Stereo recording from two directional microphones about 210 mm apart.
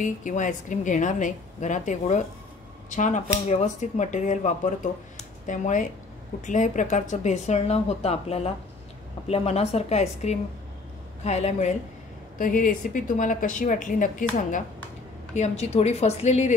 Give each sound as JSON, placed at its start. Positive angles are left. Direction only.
{"t": 0.0, "sound": "a woman's voice", "side_deg": 35}